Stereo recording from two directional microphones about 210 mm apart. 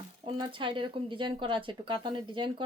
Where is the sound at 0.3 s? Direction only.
25° right (ahead or behind).